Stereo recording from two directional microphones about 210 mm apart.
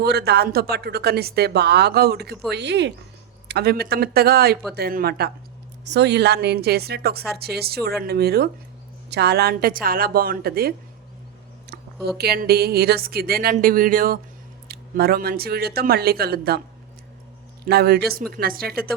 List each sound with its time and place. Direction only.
0.0 s a woman's voice: 50° right (ahead or behind)
12.0 s a woman's voice: 50° right (ahead or behind)
17.7 s a woman's voice: 50° right (ahead or behind)